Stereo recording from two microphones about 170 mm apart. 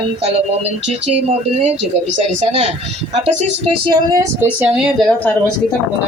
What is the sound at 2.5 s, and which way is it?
Speech, 40° right (ahead or behind).